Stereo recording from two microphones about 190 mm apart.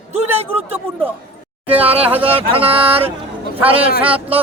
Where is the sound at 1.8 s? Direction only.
30° right (ahead or behind).